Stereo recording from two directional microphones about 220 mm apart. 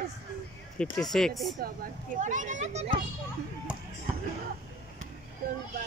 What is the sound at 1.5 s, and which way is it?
Speech, 40° right (ahead or behind).